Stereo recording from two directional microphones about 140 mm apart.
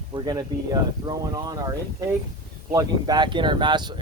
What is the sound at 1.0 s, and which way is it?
Speech, 25° right (ahead or behind).